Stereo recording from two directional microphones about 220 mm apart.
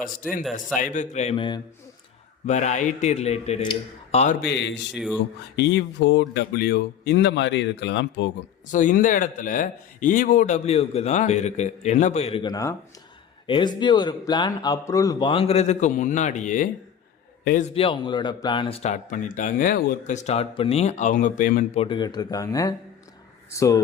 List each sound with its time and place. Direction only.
0.2 s speech: 40° left (ahead or behind); by 1.6 s 20° left (ahead or behind)
2.5 s speech: 30° left (ahead or behind)
4.4 s a man's voice: 55° left (ahead or behind)
8.7 s a man's voice: 35° left (ahead or behind)
17.7 s speech: 25° left (ahead or behind)
21.8 s speech: 20° left (ahead or behind)